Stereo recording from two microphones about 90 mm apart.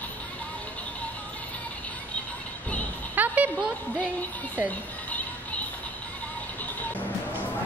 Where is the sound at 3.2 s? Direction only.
20° right (ahead or behind).